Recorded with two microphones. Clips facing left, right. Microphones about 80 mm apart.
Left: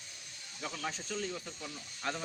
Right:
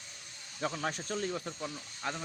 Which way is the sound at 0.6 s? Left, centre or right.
Right.